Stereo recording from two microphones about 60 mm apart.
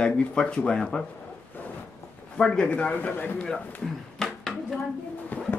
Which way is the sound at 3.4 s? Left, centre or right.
Centre.